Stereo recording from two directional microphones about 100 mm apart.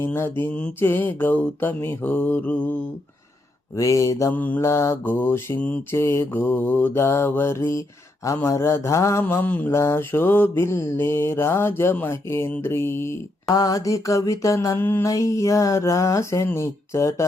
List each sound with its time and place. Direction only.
0.0 s mantra: 25° left (ahead or behind)
3.8 s mantra: 30° left (ahead or behind)
4.4 s mantra: 15° left (ahead or behind)
4.6 s mantra: 30° left (ahead or behind)
13.5 s mantra: 35° left (ahead or behind)